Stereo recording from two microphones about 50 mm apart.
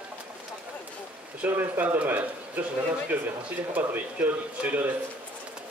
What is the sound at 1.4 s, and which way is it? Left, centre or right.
Speech, right.